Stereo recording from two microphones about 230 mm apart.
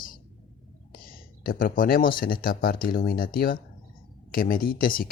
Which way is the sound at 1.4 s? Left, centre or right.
Left.